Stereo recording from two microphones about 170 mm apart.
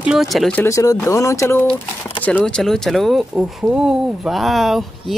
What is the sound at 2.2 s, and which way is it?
Speech, 5° left (ahead or behind).